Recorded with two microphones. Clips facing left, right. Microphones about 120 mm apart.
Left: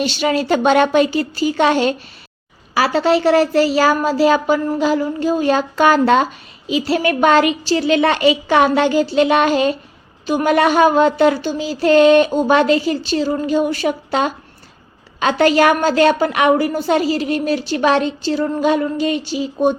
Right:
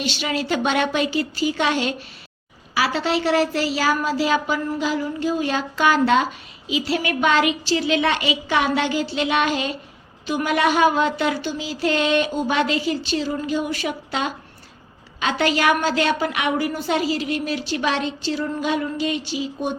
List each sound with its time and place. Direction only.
0.0 s a woman's voice: 45° left (ahead or behind)